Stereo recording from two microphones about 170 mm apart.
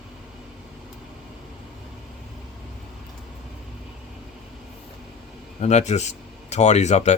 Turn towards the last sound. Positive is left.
turn(degrees=40)  # may be behind; listen again after turning